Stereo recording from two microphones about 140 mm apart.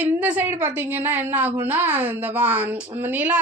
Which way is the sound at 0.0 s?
10° right (ahead or behind).